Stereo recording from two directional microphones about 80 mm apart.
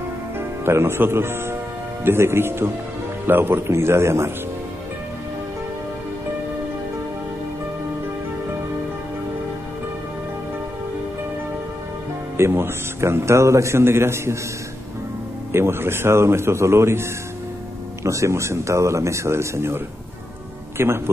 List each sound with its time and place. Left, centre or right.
0.7 s a man's voice: right
12.4 s a man's voice: right
15.5 s a man's voice: right
18.0 s a man's voice: right